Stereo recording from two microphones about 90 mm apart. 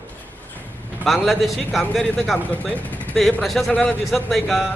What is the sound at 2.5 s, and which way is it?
Speech, 15° left (ahead or behind).